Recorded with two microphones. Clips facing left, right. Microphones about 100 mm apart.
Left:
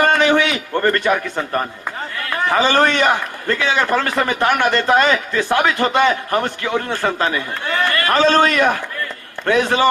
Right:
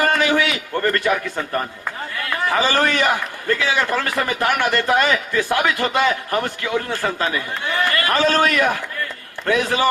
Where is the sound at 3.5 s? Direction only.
60° left (ahead or behind).